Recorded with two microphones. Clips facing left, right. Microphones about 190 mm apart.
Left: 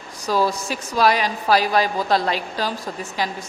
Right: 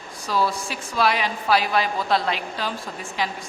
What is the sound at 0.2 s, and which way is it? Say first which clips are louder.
A woman's voice: left 3 dB; 40° left (ahead or behind).